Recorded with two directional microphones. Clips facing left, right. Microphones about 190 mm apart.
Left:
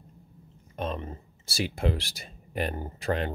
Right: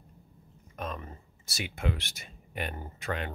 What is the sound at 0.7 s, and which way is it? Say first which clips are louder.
Speech: left 5 dB; 30° left (ahead or behind).